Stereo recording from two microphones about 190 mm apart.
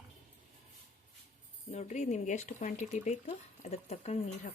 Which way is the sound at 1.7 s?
35° left (ahead or behind).